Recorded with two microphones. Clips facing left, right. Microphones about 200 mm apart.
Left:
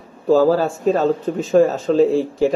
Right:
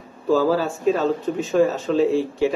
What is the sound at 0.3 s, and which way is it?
Speech, 45° left (ahead or behind).